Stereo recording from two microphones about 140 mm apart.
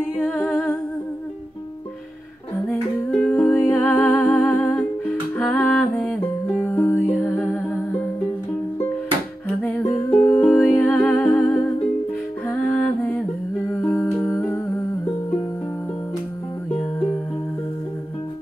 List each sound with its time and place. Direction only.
0.1 s humming: 5° left (ahead or behind)
2.7 s music: 5° left (ahead or behind)
10.2 s music: 10° left (ahead or behind)
13.7 s humming: 15° left (ahead or behind)